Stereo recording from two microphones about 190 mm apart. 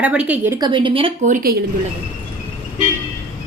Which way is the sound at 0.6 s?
25° right (ahead or behind).